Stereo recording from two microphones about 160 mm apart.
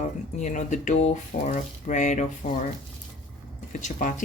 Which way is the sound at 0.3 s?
50° left (ahead or behind).